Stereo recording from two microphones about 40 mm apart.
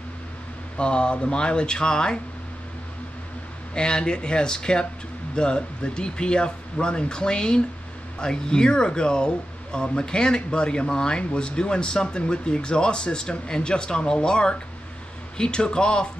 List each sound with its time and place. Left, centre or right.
0.7 s speech: left
3.7 s speech: left